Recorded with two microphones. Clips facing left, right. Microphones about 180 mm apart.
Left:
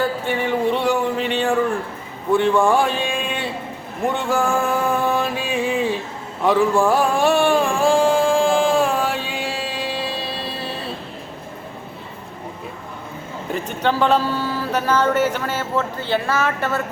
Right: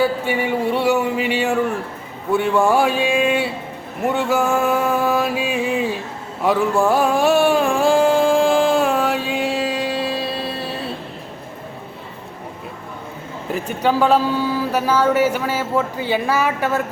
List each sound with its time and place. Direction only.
0.0 s speech: 10° right (ahead or behind)
4.0 s mantra: 5° right (ahead or behind)
6.4 s a sound: 5° right (ahead or behind)
13.5 s speech: 5° right (ahead or behind)